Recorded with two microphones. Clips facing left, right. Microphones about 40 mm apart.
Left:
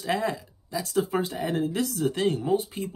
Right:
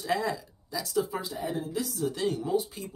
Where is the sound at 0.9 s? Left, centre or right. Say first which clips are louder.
Left 4 dB; left.